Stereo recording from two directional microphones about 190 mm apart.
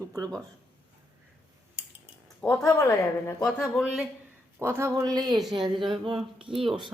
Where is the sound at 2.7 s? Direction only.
15° left (ahead or behind).